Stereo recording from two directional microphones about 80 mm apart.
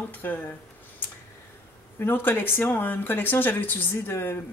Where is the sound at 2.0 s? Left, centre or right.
Left.